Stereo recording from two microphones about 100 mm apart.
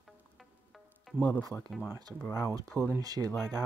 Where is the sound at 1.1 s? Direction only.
15° left (ahead or behind).